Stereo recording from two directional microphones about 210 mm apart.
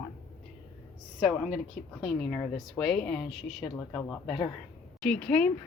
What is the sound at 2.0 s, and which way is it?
A woman's voice, 5° left (ahead or behind).